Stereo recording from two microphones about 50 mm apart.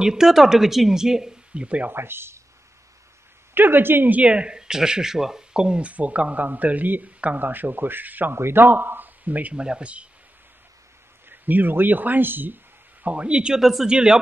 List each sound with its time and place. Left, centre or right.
0.0 s speech: centre
1.9 s speech: right
3.5 s speech: right
4.2 s speech: right
8.4 s speech: right
9.6 s speech: right
11.2 s speech: right
13.0 s speech: right
13.6 s speech: centre
13.8 s speech: centre